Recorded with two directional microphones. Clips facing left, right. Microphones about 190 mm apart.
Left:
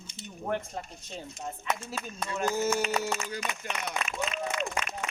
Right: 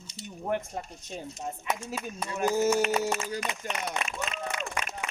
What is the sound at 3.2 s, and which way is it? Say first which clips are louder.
Speech: right 2 dB; 40° right (ahead or behind).